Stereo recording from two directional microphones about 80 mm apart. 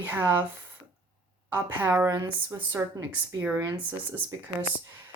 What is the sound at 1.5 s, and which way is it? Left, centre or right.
Speech, right.